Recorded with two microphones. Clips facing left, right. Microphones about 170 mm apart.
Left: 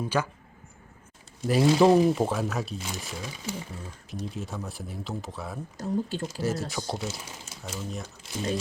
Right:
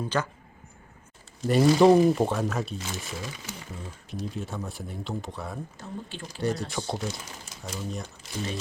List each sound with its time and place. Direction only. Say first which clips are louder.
0.0 s speech: left 1 dB; 10° left (ahead or behind)
1.5 s speech: right 2 dB; centre (ahead or behind)
5.7 s speech: left 9 dB; 40° left (ahead or behind)
6.4 s speech: right 3 dB; centre (ahead or behind)